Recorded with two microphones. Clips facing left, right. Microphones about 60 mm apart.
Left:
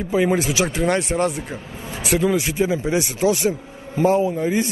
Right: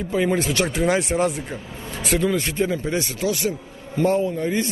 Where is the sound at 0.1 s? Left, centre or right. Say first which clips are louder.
Left 2 dB; centre.